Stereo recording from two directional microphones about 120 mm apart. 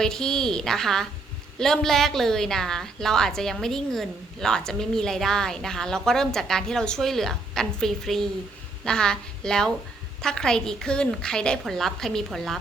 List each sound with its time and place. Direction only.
0.0 s a woman's voice: 5° left (ahead or behind)